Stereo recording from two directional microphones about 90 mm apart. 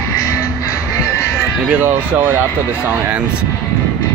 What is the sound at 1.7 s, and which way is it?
Speech, 20° right (ahead or behind).